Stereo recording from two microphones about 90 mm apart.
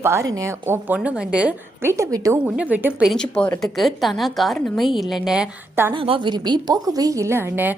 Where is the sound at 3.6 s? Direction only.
Centre (ahead or behind).